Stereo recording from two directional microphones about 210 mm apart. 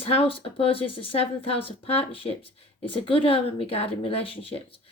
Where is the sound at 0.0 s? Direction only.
25° left (ahead or behind).